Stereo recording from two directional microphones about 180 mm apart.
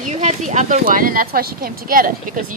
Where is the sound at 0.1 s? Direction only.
40° right (ahead or behind).